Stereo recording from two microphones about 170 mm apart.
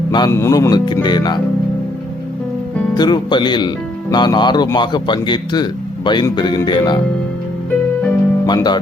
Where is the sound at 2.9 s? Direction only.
25° left (ahead or behind).